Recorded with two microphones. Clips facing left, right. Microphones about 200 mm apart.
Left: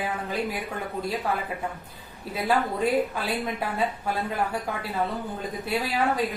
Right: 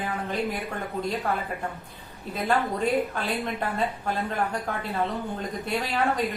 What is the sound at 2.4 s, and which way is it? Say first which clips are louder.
Speech: left 1 dB; 5° left (ahead or behind).